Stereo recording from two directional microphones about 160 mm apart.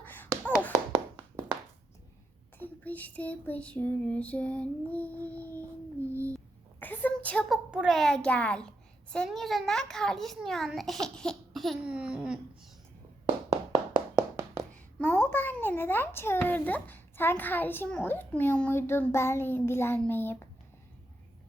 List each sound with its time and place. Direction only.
0.0 s tap: 10° left (ahead or behind)
2.6 s a sound: 10° left (ahead or behind)
6.1 s child singing: 15° right (ahead or behind)
6.7 s a child's voice: 10° left (ahead or behind); by 12.4 s 5° right (ahead or behind)
14.2 s hands: 20° right (ahead or behind)
14.7 s a child's voice: 10° left (ahead or behind)
20.0 s a sound: 15° left (ahead or behind)